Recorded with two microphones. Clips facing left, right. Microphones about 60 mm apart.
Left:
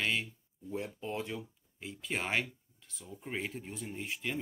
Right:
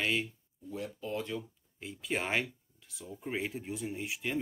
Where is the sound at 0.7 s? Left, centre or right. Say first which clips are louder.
Even; left.